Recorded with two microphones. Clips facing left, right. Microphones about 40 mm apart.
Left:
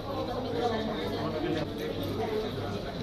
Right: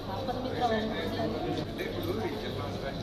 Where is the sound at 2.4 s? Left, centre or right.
Right.